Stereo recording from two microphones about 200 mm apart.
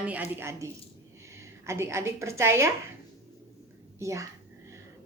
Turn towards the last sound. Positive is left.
turn(degrees=-15)  # may be behind; listen again after turning